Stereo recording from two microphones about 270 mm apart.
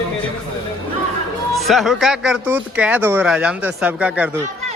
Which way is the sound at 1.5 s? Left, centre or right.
Centre.